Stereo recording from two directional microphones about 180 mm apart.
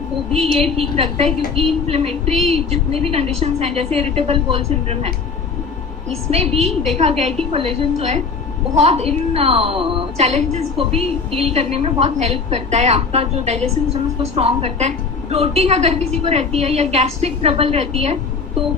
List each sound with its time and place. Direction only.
0.3 s a woman's voice: 35° right (ahead or behind)
6.3 s a woman's voice: 35° right (ahead or behind)